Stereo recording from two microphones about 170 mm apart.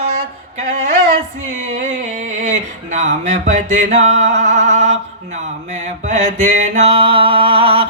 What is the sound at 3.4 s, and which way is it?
Music, 45° right (ahead or behind).